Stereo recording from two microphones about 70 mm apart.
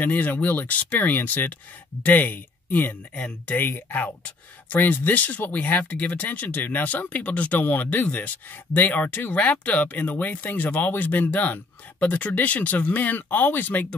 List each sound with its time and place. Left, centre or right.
0.0 s speech: left